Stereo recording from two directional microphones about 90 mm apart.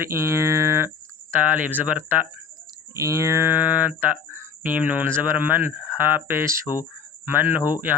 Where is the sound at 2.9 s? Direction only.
35° right (ahead or behind).